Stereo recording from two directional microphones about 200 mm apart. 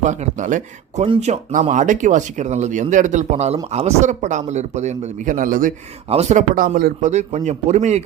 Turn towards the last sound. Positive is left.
turn(degrees=-35)  # may be behind; listen again after turning